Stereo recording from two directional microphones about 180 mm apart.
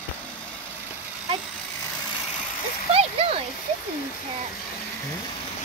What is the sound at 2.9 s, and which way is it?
Splash, 35° right (ahead or behind).